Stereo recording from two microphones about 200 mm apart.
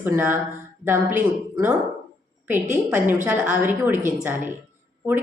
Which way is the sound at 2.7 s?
10° right (ahead or behind).